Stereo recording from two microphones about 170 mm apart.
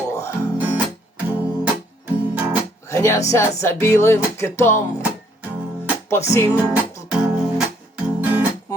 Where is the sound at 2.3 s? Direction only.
10° right (ahead or behind).